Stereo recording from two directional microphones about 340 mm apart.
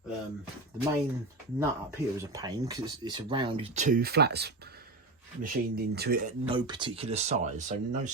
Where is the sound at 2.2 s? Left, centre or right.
Centre.